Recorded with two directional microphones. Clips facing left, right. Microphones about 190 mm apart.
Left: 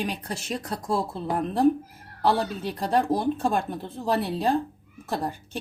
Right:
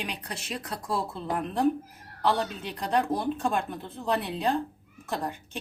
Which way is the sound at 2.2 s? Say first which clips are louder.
Left 3 dB; 40° left (ahead or behind).